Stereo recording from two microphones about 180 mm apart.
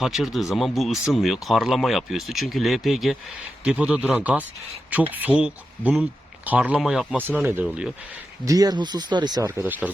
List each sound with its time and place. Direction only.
0.0 s speech: centre (ahead or behind)
8.4 s speech: 20° right (ahead or behind)